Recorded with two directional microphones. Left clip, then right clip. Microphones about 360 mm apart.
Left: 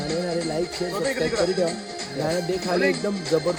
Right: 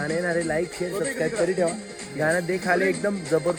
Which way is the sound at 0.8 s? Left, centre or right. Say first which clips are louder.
Left 2 dB; left.